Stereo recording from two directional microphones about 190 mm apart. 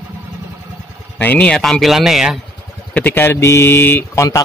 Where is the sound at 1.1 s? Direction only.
10° left (ahead or behind).